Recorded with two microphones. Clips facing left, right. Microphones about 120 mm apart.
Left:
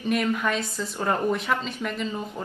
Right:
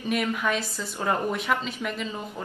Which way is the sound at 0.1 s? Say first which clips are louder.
Left 1 dB; centre (ahead or behind).